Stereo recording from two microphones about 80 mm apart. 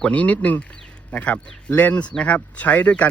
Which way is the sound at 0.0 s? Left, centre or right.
Centre.